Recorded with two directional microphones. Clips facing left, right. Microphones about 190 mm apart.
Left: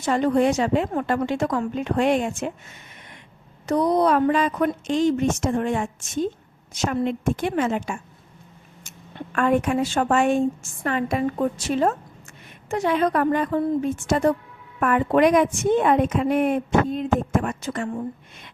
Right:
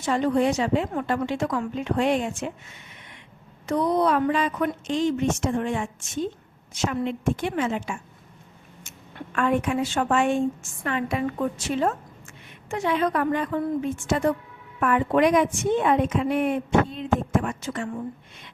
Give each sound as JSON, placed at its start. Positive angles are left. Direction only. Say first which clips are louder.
{"t": 0.0, "sound": "a woman's voice", "louder": "left 2 dB", "side_deg": 45}
{"t": 3.7, "sound": "a woman's voice", "louder": "left 3 dB", "side_deg": 40}
{"t": 9.3, "sound": "a woman's voice", "louder": "left 3 dB", "side_deg": 45}